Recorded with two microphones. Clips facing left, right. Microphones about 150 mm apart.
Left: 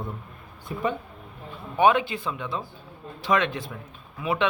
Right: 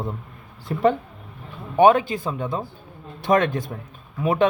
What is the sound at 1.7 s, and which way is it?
A man's voice, 40° right (ahead or behind).